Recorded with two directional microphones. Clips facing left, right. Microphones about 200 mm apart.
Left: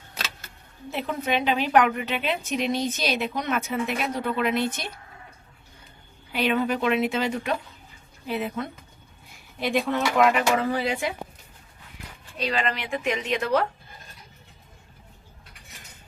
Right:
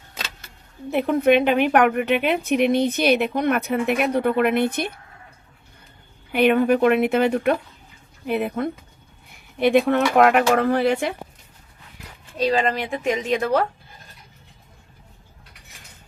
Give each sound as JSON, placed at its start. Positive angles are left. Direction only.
{"t": 0.9, "sound": "a woman's voice", "side_deg": -60}
{"t": 6.3, "sound": "a woman's voice", "side_deg": -55}
{"t": 12.4, "sound": "speech", "side_deg": -40}